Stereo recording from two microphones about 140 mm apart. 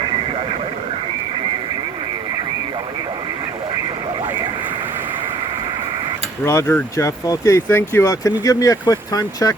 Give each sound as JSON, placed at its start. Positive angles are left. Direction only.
{"t": 6.4, "sound": "speech", "side_deg": 20}